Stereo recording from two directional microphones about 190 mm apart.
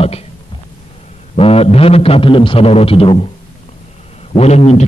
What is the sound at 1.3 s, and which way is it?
A man's voice, 30° left (ahead or behind).